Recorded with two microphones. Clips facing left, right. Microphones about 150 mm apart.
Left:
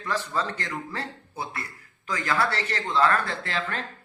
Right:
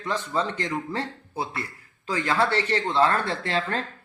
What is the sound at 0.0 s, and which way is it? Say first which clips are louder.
Speech: right 2 dB; 20° right (ahead or behind).